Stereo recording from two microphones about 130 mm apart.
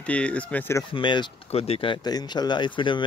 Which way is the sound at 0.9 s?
40° left (ahead or behind).